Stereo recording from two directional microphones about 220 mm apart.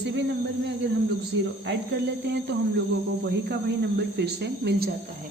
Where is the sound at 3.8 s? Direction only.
45° right (ahead or behind).